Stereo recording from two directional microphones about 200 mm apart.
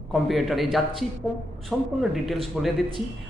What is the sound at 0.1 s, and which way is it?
A man's voice, centre (ahead or behind).